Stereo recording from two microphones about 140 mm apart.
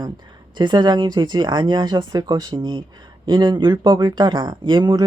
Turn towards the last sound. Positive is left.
turn(degrees=-30)  # may be behind; listen again after turning